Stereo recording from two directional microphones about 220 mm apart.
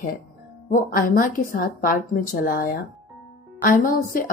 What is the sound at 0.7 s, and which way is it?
A woman's voice, 40° left (ahead or behind).